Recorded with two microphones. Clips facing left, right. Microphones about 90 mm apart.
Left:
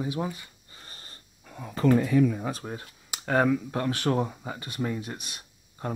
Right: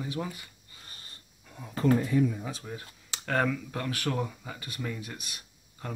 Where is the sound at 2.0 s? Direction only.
85° left.